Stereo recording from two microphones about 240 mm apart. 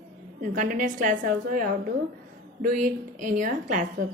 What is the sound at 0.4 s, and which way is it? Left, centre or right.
A woman's voice, right.